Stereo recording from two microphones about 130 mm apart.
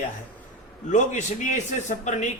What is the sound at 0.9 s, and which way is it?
Speech, 70° left (ahead or behind).